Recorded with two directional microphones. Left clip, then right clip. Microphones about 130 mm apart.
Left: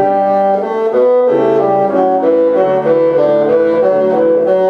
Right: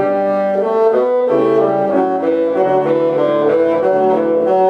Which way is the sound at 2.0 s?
5° left (ahead or behind).